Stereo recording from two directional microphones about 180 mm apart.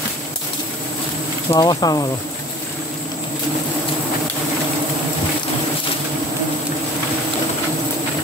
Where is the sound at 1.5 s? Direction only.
20° left (ahead or behind).